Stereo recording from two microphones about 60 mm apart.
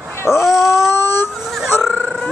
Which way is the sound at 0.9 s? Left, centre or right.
Left.